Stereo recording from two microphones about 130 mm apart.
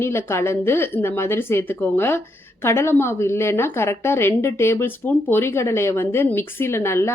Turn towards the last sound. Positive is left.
turn(degrees=20)  # may be behind; listen again after turning